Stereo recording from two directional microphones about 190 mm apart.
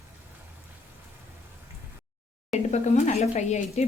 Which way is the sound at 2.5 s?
35° left (ahead or behind).